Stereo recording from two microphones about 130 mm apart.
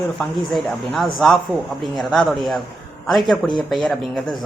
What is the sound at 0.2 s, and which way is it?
Speech, centre (ahead or behind).